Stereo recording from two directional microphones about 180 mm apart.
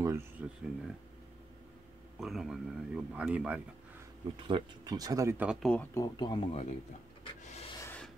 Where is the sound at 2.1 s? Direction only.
Centre (ahead or behind).